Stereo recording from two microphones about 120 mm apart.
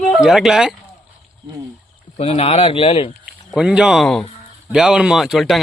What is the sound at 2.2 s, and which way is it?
Speech, 55° left (ahead or behind).